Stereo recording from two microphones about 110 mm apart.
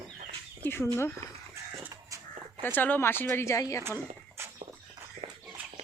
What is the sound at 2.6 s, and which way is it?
Speech, 15° left (ahead or behind).